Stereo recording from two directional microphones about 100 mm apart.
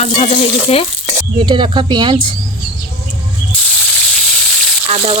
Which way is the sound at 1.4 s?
60° right (ahead or behind).